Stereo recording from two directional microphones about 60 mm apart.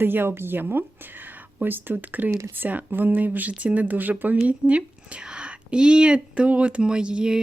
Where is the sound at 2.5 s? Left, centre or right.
Right.